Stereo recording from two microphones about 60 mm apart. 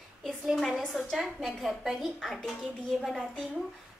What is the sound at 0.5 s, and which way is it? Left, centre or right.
A woman's voice, centre.